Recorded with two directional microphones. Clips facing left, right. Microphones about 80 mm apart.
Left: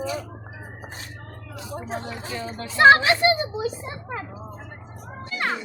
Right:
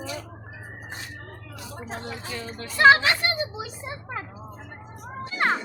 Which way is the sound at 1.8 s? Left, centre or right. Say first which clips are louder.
Left 3 dB; centre.